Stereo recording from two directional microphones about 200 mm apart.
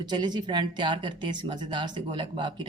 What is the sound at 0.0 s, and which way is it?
Speech, 20° right (ahead or behind).